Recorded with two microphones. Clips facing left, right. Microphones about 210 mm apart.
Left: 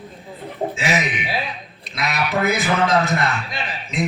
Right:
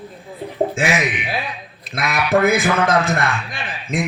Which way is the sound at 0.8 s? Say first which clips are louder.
Right 2 dB; 50° right (ahead or behind).